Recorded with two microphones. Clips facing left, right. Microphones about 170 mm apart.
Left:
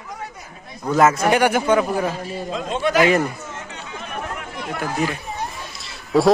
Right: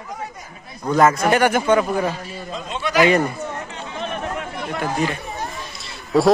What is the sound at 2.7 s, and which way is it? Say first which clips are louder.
Speech: left 3 dB; 50° left (ahead or behind).